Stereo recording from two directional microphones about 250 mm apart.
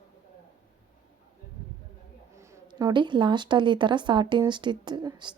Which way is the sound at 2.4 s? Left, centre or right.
Centre.